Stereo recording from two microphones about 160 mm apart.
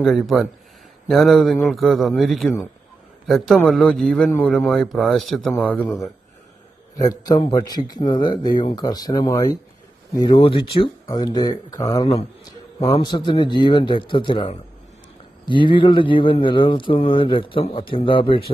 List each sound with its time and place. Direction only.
0.0 s a man's voice: centre (ahead or behind)
5.7 s a man's voice: 10° left (ahead or behind)
7.0 s speech: 25° left (ahead or behind)